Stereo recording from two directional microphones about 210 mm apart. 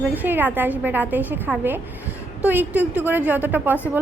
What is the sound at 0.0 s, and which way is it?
A woman's voice, 10° right (ahead or behind).